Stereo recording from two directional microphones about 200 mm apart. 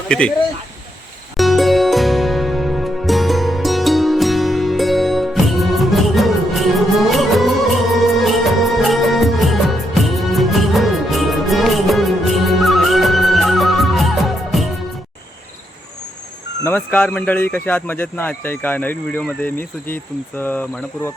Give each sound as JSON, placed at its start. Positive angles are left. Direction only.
{"t": 0.1, "sound": "speech", "side_deg": 5}
{"t": 1.4, "sound": "music", "side_deg": 0}
{"t": 8.0, "sound": "music of bollywood", "side_deg": 0}
{"t": 16.6, "sound": "a man's voice", "side_deg": 10}